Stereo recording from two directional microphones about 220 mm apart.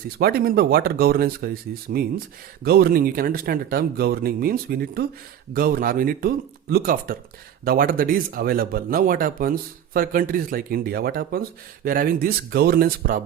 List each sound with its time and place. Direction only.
0.2 s speech: 45° right (ahead or behind)